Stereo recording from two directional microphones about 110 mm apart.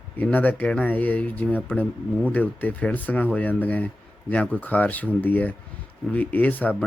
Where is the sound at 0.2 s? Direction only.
15° left (ahead or behind).